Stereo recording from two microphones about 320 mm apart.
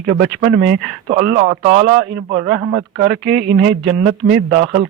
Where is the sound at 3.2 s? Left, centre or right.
Right.